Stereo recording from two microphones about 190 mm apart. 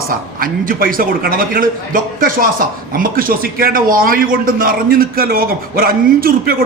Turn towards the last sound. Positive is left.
turn(degrees=-50)  # may be behind; listen again after turning